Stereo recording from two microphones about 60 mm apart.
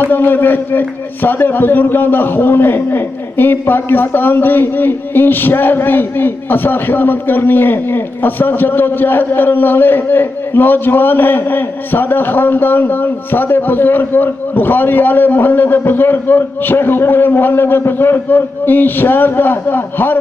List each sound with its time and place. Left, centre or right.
0.0 s speech: left